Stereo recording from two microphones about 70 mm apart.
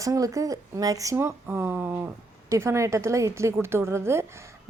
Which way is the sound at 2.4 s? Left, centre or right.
Right.